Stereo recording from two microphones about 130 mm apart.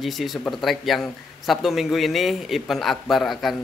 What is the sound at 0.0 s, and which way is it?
Speech, centre (ahead or behind).